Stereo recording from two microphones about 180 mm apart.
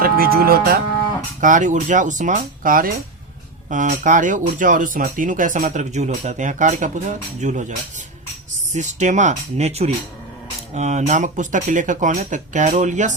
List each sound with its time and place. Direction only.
0.0 s speech: 55° right (ahead or behind)
1.4 s speech: 45° right (ahead or behind)